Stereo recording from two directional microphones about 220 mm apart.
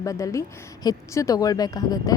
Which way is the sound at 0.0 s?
15° left (ahead or behind).